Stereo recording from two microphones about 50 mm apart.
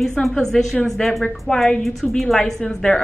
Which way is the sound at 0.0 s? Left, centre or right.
Centre.